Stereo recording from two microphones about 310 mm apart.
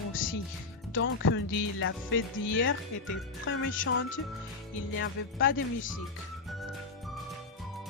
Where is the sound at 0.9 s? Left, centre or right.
Left.